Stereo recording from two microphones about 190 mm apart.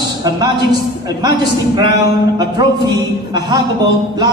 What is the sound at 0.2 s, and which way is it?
Speech, 20° right (ahead or behind).